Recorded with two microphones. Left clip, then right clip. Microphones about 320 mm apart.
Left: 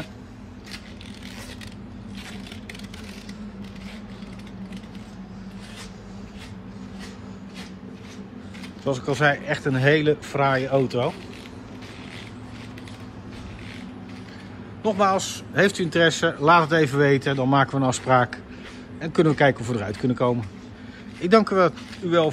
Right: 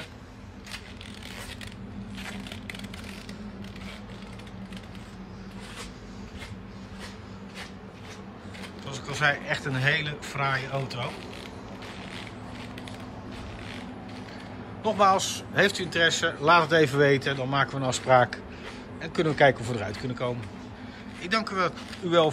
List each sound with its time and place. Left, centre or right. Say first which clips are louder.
8.8 s speech: left 5 dB; centre
14.8 s speech: left 1 dB; centre